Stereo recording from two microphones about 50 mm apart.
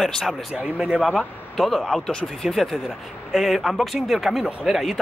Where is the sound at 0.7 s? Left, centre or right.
Centre.